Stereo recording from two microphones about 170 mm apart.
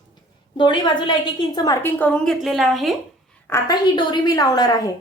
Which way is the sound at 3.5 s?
25° left (ahead or behind).